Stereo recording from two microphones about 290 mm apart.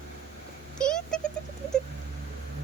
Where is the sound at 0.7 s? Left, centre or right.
Centre.